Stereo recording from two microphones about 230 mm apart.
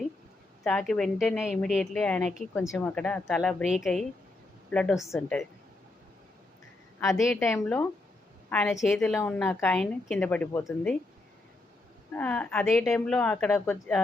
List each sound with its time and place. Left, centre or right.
0.6 s a woman's voice: centre
7.3 s a woman's voice: centre
12.1 s a woman's voice: centre